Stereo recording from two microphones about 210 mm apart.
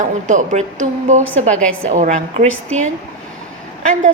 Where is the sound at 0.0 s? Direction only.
35° right (ahead or behind).